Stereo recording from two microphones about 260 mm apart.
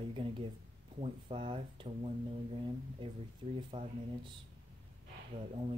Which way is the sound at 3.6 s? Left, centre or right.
Centre.